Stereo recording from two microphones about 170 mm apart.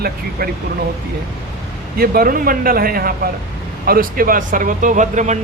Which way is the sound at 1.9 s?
60° right (ahead or behind).